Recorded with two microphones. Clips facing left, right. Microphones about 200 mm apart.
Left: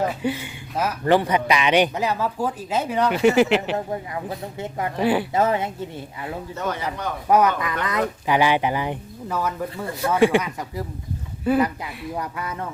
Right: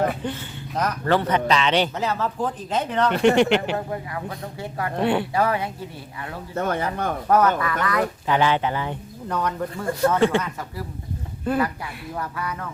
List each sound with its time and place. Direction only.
0.2 s a man's voice: 10° left (ahead or behind)
4.1 s speech: 20° left (ahead or behind)
4.9 s speech: centre (ahead or behind)
5.3 s speech: 20° left (ahead or behind)
6.5 s speech: 55° right (ahead or behind)
7.3 s a man's voice: 15° left (ahead or behind)
12.1 s speech: 20° left (ahead or behind)